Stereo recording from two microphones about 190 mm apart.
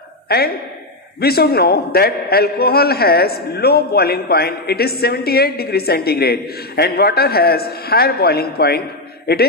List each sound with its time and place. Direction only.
1.2 s a man's voice: 55° left (ahead or behind)